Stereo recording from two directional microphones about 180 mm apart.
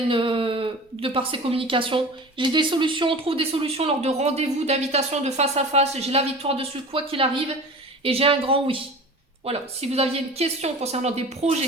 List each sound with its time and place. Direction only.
0.1 s speech: 30° right (ahead or behind)